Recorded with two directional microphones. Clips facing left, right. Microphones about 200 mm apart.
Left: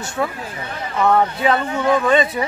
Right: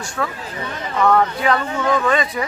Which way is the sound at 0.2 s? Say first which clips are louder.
Left 2 dB; 20° left (ahead or behind).